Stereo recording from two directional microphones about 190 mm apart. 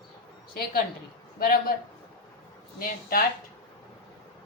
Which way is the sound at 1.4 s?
50° left (ahead or behind).